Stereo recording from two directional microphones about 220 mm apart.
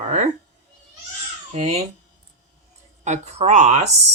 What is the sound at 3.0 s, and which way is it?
Speech, 30° right (ahead or behind).